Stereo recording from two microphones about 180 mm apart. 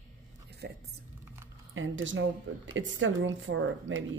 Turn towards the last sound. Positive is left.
turn(degrees=-90)